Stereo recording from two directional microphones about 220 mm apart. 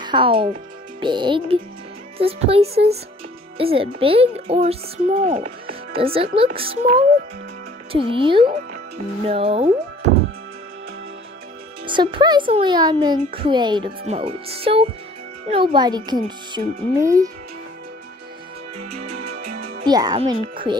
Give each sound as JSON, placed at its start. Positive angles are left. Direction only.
{"t": 0.0, "sound": "a child's voice", "side_deg": -20}
{"t": 6.1, "sound": "a child's voice", "side_deg": -25}
{"t": 11.8, "sound": "a child's voice", "side_deg": -20}
{"t": 19.8, "sound": "a child's voice", "side_deg": -15}